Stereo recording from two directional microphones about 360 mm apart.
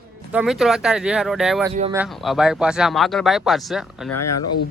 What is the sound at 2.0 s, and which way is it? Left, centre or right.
Speech, centre.